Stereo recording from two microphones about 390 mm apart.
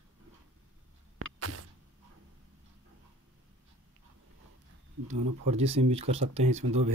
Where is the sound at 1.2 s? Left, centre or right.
Right.